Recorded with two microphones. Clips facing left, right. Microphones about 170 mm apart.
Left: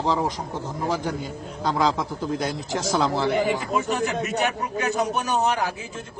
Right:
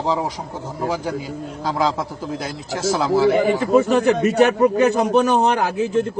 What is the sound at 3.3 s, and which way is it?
A man's voice, 65° right (ahead or behind).